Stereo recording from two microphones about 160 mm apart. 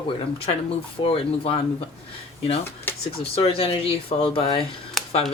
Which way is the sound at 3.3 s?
35° left (ahead or behind).